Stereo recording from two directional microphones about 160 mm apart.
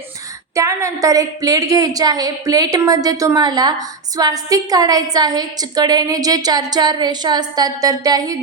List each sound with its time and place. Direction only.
0.5 s a woman's voice: 20° right (ahead or behind)